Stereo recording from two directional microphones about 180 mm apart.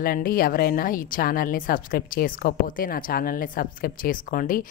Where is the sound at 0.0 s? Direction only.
55° left (ahead or behind).